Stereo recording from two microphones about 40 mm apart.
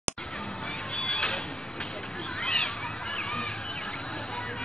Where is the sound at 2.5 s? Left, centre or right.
Left.